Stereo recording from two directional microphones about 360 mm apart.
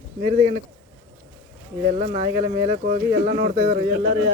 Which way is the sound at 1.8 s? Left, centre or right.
Centre.